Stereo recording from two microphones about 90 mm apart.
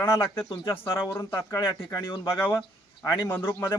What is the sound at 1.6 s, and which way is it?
Speech, 45° left (ahead or behind).